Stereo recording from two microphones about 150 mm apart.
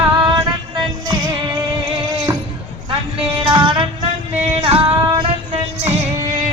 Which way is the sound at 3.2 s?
35° right (ahead or behind).